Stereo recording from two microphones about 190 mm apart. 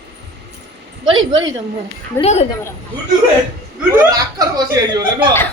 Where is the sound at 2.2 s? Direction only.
35° left (ahead or behind).